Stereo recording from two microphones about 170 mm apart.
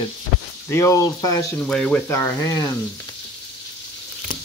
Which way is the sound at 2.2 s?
20° left (ahead or behind).